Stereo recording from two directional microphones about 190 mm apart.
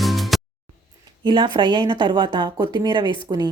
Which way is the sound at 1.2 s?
25° right (ahead or behind).